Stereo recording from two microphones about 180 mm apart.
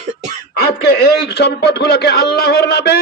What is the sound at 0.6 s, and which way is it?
A man's voice, 65° left (ahead or behind).